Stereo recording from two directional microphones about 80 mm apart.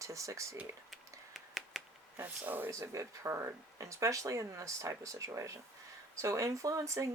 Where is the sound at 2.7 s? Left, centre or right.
Right.